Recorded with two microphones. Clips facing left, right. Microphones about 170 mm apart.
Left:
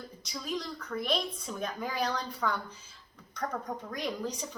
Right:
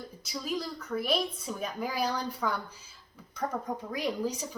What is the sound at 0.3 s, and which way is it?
A woman's voice, 10° right (ahead or behind).